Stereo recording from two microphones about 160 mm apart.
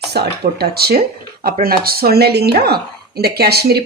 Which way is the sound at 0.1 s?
90° right.